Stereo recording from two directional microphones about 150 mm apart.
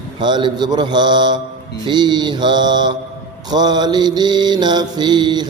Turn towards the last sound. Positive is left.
turn(degrees=-30)  # may be behind; listen again after turning